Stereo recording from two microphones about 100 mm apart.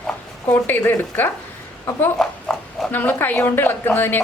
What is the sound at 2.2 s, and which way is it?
Oink, 5° left (ahead or behind).